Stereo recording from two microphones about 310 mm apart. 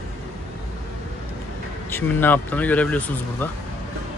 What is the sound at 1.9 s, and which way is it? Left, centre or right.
Speech, centre.